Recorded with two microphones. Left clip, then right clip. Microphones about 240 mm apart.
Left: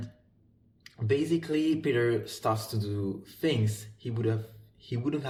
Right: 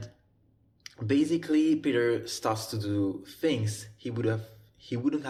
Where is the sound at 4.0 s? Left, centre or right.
Right.